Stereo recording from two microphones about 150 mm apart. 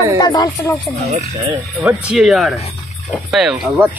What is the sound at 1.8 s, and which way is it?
Speech, 5° right (ahead or behind).